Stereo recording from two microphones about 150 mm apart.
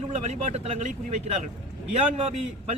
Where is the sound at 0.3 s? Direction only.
45° right (ahead or behind).